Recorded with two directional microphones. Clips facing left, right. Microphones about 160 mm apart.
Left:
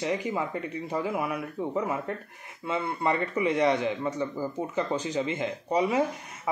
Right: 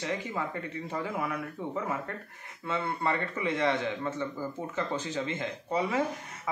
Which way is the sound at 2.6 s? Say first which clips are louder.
Left 3 dB; 10° left (ahead or behind).